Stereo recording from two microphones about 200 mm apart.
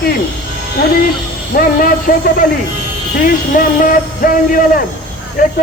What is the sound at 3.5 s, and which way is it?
Speech, 45° left (ahead or behind).